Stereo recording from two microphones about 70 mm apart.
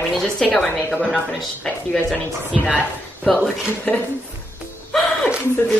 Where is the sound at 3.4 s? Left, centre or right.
Left.